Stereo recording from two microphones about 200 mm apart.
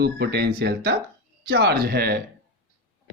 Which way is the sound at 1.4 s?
55° right (ahead or behind).